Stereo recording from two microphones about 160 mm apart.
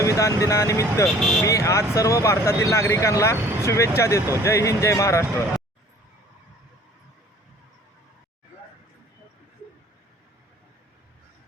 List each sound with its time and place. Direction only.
0.0 s speech: 20° left (ahead or behind)